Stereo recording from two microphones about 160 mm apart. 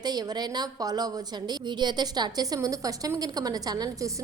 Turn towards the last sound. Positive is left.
turn(degrees=-25)  # may be behind; listen again after turning